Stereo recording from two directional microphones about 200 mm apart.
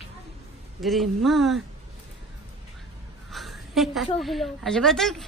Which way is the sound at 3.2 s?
Centre (ahead or behind).